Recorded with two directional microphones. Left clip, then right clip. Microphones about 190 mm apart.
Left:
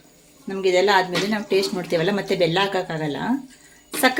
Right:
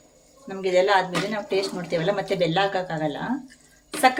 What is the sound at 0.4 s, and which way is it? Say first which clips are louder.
A woman's voice: left 2 dB; 45° left (ahead or behind).